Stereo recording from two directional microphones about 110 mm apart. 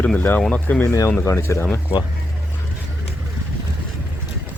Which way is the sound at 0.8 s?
30° left (ahead or behind).